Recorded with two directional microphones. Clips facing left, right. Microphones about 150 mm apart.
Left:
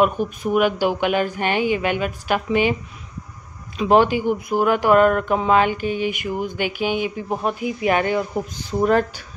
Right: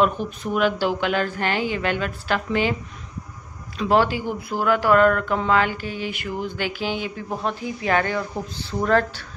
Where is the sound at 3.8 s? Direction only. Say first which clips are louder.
Left 4 dB; 20° left (ahead or behind).